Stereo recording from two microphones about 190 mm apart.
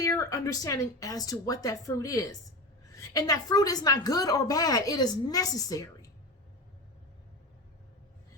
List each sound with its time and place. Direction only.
0.0 s a woman's voice: 15° left (ahead or behind)